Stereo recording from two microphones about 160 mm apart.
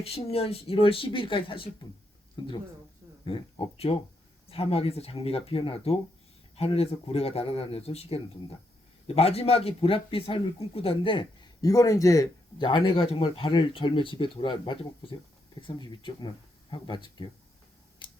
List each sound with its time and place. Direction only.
0.0 s speech: 40° left (ahead or behind)
18.0 s tick-tock: 30° left (ahead or behind)